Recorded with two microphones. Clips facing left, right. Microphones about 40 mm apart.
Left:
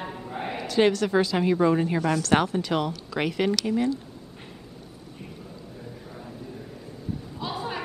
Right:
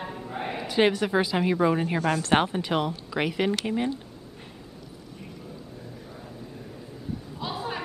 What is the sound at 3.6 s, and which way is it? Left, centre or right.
Speech, right.